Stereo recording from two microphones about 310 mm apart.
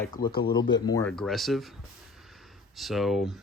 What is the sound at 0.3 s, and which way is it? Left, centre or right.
Speech, left.